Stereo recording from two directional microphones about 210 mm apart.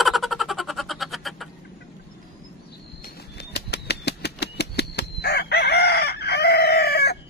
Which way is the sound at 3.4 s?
50° left (ahead or behind).